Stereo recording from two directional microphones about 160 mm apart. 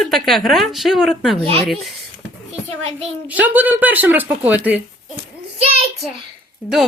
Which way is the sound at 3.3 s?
10° right (ahead or behind).